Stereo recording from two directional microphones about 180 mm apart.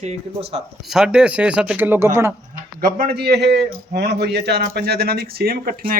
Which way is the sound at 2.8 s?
55° right (ahead or behind).